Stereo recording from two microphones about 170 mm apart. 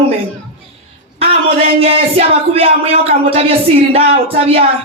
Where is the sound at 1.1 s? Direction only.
35° right (ahead or behind).